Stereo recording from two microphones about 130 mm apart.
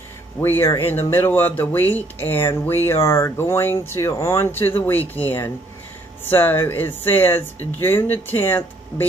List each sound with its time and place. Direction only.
0.4 s speech: 20° left (ahead or behind)